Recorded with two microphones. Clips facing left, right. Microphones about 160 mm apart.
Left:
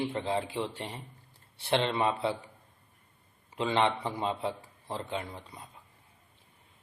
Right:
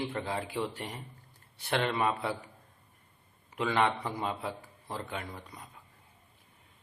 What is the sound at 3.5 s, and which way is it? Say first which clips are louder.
Speech: left 1 dB; 25° left (ahead or behind).